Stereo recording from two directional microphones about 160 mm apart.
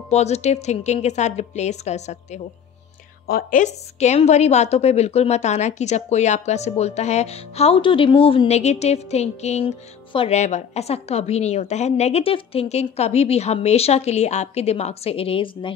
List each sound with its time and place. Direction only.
0.1 s a woman's voice: 45° left (ahead or behind)
3.3 s a woman's voice: 65° left (ahead or behind); by 15.7 s 35° left (ahead or behind)